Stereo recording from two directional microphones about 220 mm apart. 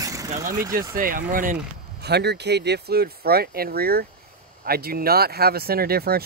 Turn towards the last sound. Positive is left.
turn(degrees=-45)  # may be behind; listen again after turning